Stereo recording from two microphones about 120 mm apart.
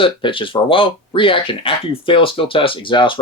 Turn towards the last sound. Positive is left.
turn(degrees=40)  # may be behind; listen again after turning